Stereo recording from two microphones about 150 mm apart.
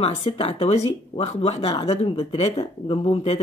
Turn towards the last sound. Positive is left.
turn(degrees=40)  # may be behind; listen again after turning